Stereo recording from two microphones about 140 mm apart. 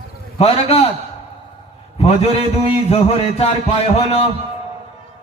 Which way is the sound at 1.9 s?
45° left (ahead or behind).